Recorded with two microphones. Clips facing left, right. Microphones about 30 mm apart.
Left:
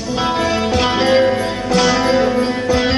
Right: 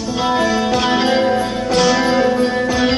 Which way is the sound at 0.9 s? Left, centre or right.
Centre.